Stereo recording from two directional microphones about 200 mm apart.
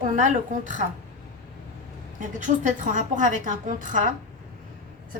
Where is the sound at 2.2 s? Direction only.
40° right (ahead or behind).